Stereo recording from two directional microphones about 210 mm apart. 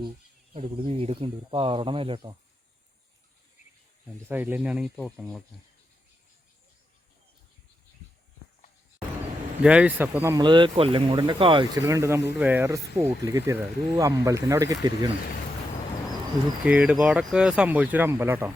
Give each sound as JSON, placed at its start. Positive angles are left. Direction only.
{"t": 0.5, "sound": "speech", "side_deg": -30}
{"t": 4.0, "sound": "speech", "side_deg": -10}
{"t": 9.6, "sound": "speech", "side_deg": -5}
{"t": 16.6, "sound": "speech", "side_deg": -5}